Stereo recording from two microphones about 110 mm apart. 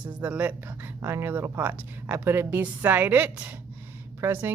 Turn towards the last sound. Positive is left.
turn(degrees=-20)  # may be behind; listen again after turning